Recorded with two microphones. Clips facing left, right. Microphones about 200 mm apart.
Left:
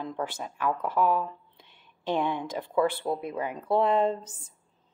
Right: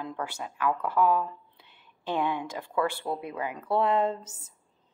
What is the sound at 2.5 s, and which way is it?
Speech, 15° left (ahead or behind).